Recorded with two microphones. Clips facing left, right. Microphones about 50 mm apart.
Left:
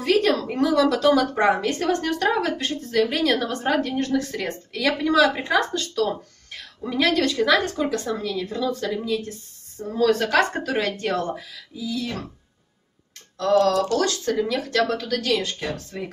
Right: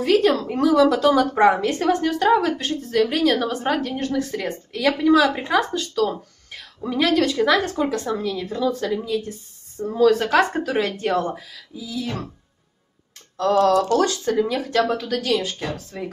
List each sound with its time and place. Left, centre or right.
0.0 s a woman's voice: centre
2.3 s a woman's voice: centre
7.2 s a woman's voice: centre
13.4 s a woman's voice: centre